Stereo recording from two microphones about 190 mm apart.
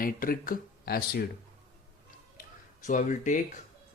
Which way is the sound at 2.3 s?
40° left (ahead or behind).